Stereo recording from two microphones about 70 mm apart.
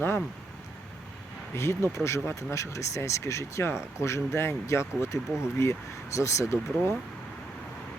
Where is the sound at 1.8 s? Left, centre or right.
Left.